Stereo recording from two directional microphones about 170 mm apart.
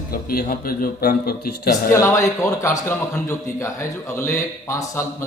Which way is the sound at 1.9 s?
15° left (ahead or behind).